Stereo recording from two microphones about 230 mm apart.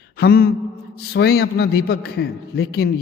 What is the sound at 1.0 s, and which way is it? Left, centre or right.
A man's voice, left.